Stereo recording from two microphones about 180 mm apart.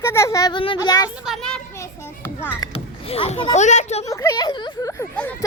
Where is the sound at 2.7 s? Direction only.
35° left (ahead or behind).